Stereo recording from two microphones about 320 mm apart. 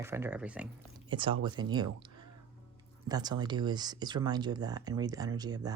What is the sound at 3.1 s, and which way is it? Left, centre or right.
Speech, centre.